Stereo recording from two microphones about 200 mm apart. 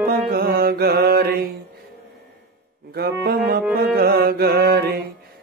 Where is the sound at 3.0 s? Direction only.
50° right (ahead or behind).